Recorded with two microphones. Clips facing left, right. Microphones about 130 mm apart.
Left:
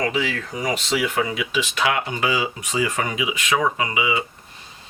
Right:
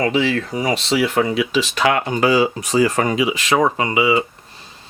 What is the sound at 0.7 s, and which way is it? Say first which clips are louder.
Speech: right 4 dB; 70° right (ahead or behind).